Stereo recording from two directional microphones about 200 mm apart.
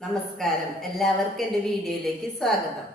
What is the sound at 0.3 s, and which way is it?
A woman's voice, centre (ahead or behind).